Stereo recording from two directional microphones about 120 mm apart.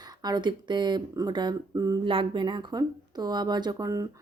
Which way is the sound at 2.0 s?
45° right (ahead or behind).